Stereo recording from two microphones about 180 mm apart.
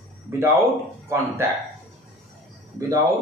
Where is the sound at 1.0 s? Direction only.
15° right (ahead or behind).